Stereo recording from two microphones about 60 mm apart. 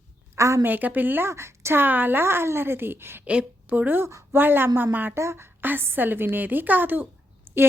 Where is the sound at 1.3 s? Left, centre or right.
Right.